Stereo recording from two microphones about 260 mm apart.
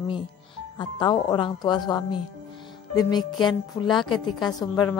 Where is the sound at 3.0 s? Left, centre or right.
Centre.